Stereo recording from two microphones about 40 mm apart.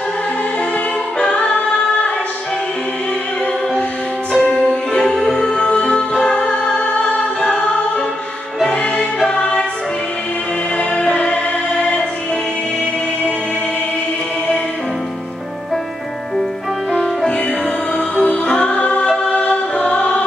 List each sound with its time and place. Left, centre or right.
1.2 s singing: left
4.4 s music: left
5.1 s music: centre
5.6 s music: centre
9.4 s music: left
10.8 s music: left
18.1 s music: left
19.2 s music: centre
19.5 s music: left